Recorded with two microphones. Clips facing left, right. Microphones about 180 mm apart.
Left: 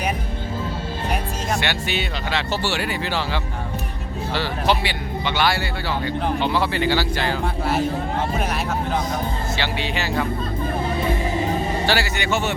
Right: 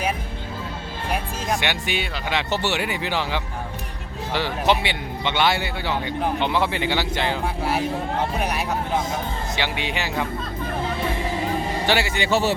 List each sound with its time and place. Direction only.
1.5 s speech: 15° right (ahead or behind)
9.6 s speech: 15° right (ahead or behind)
11.9 s speech: 20° right (ahead or behind)
12.3 s speech: 35° right (ahead or behind)